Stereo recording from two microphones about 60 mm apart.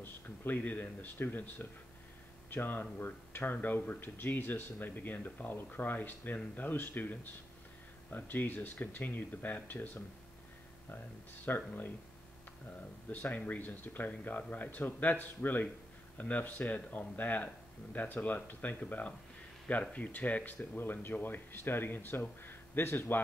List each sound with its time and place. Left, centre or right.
0.0 s speech: left
11.4 s speech: left
13.1 s speech: left